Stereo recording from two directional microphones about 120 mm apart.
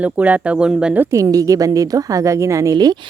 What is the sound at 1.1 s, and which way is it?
A woman's voice, 30° right (ahead or behind).